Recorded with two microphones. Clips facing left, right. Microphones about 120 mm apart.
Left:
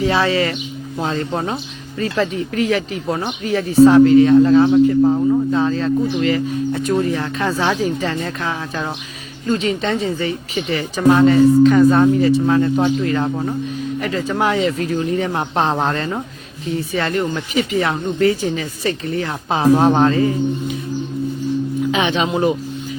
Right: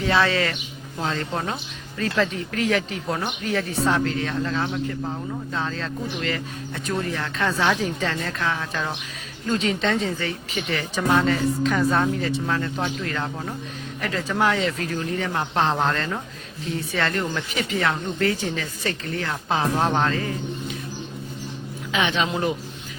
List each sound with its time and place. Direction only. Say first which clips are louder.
0.0 s speech: left 4 dB; 10° left (ahead or behind)
5.7 s speech: left 12 dB; 10° left (ahead or behind)
7.8 s speech: left 6 dB; 10° left (ahead or behind)
9.5 s speech: left 4 dB; centre (ahead or behind)
12.5 s speech: left 11 dB; 20° left (ahead or behind)
17.7 s speech: left 4 dB; 15° left (ahead or behind)
21.9 s speech: left 2 dB; 20° left (ahead or behind)